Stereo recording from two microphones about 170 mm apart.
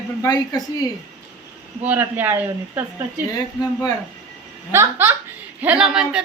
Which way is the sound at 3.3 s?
20° left (ahead or behind).